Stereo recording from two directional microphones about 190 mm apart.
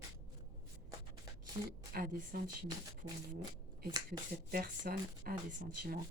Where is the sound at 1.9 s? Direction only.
50° right (ahead or behind).